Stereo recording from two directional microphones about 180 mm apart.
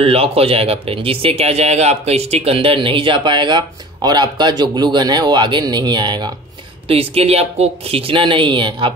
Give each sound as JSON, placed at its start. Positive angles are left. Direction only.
{"t": 0.0, "sound": "speech", "side_deg": -35}